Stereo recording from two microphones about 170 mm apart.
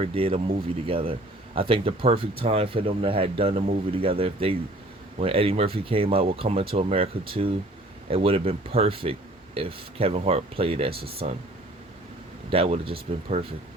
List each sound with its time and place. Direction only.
0.0 s speech: 30° right (ahead or behind)
12.5 s speech: 35° right (ahead or behind)